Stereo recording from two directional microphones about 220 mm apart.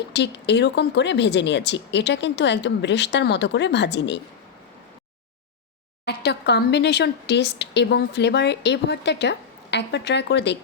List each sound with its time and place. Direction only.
0.1 s speech: 50° left (ahead or behind)
6.1 s speech: 50° left (ahead or behind)